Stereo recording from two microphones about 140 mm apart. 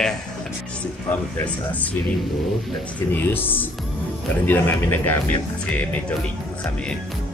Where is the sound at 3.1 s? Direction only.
15° left (ahead or behind).